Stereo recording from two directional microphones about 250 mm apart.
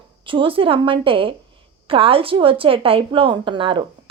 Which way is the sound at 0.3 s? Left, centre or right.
Right.